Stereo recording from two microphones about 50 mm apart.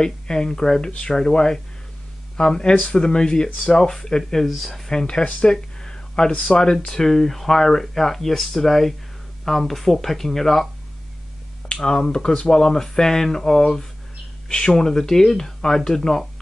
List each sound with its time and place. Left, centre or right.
0.0 s speech: centre
4.9 s speech: centre
5.8 s a sound: centre
6.5 s speech: centre
11.7 s speech: centre